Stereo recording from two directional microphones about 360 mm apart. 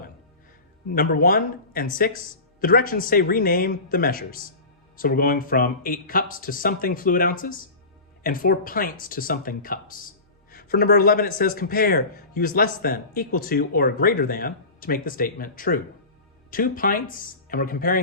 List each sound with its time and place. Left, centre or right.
0.9 s speech: left